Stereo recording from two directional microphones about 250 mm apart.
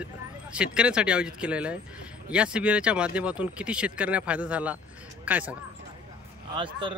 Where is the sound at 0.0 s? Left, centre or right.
Centre.